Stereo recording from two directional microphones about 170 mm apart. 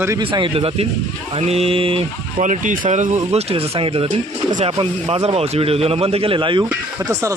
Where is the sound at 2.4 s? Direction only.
50° right (ahead or behind); by 6.6 s 30° right (ahead or behind).